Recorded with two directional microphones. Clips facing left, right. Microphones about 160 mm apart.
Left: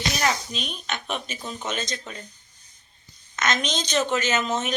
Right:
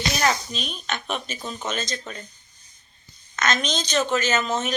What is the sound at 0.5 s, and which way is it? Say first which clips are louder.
Speech: right 1 dB; 10° left (ahead or behind).